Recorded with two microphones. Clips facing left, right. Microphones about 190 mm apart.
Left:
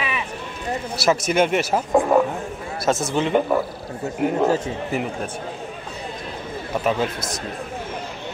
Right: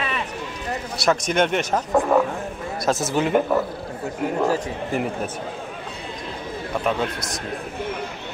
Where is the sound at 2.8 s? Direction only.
Centre (ahead or behind).